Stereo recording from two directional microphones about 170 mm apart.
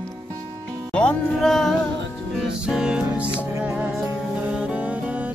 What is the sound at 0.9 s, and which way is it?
Music, 5° left (ahead or behind).